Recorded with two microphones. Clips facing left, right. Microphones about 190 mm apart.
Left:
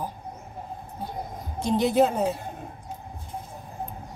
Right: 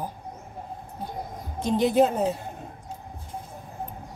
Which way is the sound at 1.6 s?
45° right (ahead or behind).